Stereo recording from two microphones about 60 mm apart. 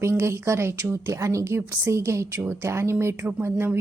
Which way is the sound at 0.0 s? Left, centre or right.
Right.